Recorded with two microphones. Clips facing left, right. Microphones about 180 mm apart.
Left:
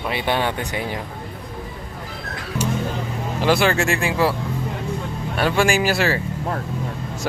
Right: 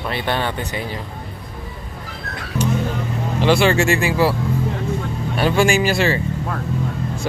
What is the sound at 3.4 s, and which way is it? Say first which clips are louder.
Speech: right 3 dB; 5° left (ahead or behind).